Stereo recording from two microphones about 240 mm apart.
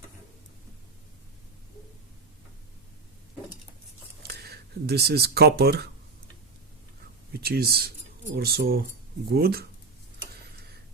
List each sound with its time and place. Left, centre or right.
4.2 s speech: right
7.4 s speech: right